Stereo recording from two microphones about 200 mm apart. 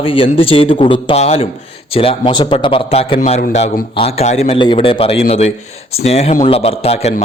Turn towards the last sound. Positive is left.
turn(degrees=30)  # may be behind; listen again after turning